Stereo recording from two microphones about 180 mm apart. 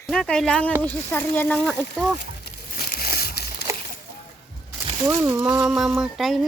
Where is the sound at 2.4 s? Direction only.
60° left (ahead or behind).